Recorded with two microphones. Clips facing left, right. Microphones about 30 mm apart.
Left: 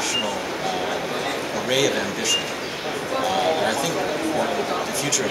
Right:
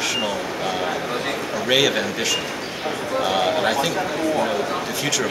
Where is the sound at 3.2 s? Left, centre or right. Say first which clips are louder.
Right 1 dB; centre.